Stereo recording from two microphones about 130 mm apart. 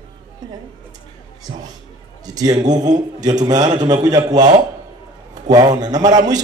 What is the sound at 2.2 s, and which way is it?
A man's voice, 30° right (ahead or behind).